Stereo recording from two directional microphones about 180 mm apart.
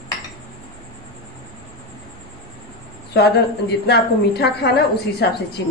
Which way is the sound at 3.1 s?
65° left (ahead or behind).